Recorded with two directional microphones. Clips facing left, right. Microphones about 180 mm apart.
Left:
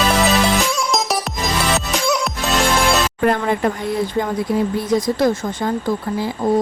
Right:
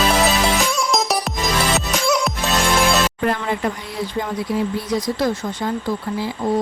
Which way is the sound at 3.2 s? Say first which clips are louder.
Left 4 dB; 50° left (ahead or behind).